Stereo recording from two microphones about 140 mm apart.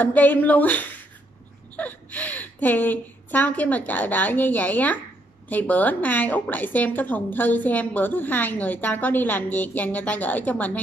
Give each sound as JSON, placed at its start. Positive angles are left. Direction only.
{"t": 0.0, "sound": "a woman's voice", "side_deg": 10}